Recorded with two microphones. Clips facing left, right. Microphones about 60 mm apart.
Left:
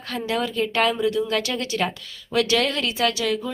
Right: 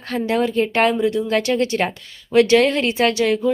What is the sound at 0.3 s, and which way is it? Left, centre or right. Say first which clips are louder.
A woman's voice: right 5 dB; right.